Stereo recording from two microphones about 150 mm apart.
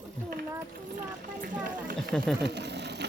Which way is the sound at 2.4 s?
90° right.